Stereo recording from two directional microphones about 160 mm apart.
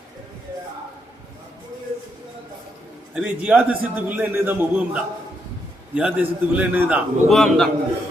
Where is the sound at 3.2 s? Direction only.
10° right (ahead or behind).